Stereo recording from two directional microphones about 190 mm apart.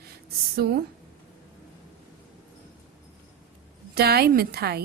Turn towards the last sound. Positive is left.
turn(degrees=-55)  # may be behind; listen again after turning